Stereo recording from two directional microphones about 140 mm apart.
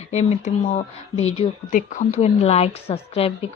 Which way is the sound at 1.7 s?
65° left (ahead or behind).